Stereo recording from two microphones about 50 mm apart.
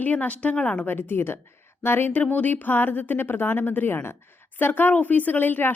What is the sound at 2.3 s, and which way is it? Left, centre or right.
A woman's voice, left.